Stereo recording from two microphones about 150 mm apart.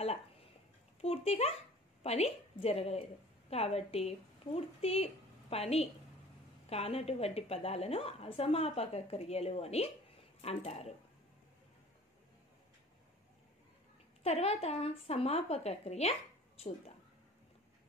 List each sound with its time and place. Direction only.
1.0 s a child's voice: 40° left (ahead or behind)
14.2 s a woman's voice: 45° left (ahead or behind)